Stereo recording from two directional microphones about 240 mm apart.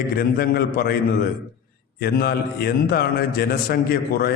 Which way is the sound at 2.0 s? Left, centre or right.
Left.